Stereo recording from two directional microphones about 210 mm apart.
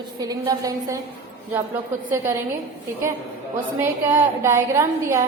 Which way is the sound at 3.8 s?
10° right (ahead or behind).